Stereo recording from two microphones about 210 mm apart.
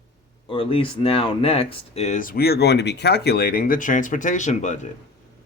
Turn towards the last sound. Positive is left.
turn(degrees=35)  # may be behind; listen again after turning